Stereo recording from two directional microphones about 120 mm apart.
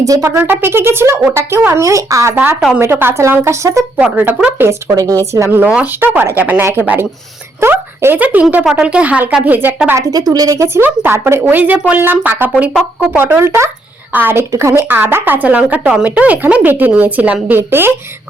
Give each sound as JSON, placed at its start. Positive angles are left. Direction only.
{"t": 0.0, "sound": "speech", "side_deg": -25}
{"t": 2.3, "sound": "a woman's voice", "side_deg": -15}
{"t": 3.9, "sound": "a woman's voice", "side_deg": -10}
{"t": 10.3, "sound": "a woman's voice", "side_deg": -30}